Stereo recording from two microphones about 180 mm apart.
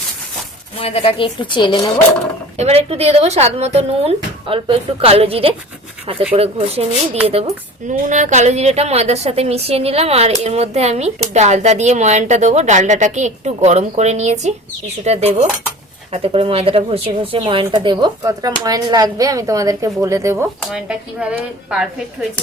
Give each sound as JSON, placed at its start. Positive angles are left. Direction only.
{"t": 0.8, "sound": "a woman's voice", "side_deg": 30}
{"t": 2.6, "sound": "a woman's voice", "side_deg": -35}
{"t": 20.6, "sound": "speech", "side_deg": 0}